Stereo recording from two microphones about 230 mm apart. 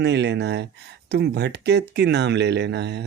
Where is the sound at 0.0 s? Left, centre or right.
Right.